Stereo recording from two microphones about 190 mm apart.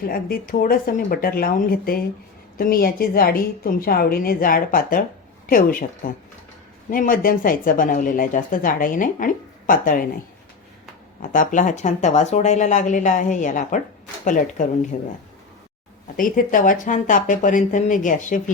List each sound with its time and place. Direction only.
0.1 s speech: 50° left (ahead or behind)
6.9 s speech: 45° left (ahead or behind)
11.2 s speech: 45° left (ahead or behind)
16.1 s speech: 45° left (ahead or behind)